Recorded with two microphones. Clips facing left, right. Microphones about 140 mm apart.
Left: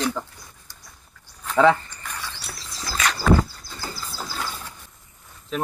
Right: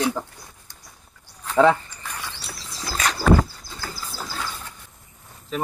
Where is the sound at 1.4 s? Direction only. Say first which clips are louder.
Even; 5° right (ahead or behind).